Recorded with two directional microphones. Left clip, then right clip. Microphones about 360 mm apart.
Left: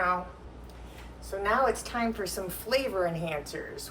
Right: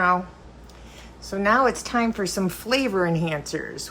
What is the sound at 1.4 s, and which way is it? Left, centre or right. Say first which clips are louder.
A woman's voice: right 7 dB; centre.